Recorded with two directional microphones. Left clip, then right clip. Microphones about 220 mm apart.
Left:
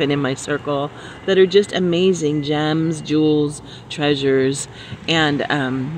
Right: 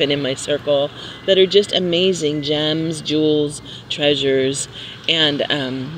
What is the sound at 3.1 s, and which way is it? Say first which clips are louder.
Speech: even; 25° left (ahead or behind).